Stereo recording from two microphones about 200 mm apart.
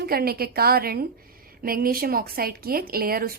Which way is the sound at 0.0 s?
50° right (ahead or behind).